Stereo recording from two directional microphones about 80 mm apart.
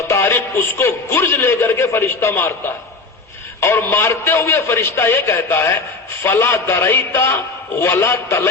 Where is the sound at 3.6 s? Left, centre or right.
Left.